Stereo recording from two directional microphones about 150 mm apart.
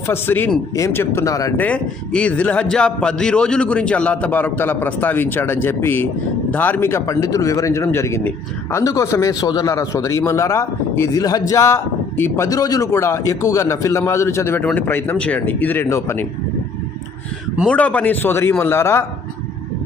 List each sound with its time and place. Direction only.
0.1 s a man's voice: 15° left (ahead or behind)
1.5 s a man's voice: 10° left (ahead or behind)
17.7 s a man's voice: 10° left (ahead or behind)